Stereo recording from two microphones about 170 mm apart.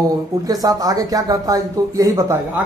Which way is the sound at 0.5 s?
20° right (ahead or behind).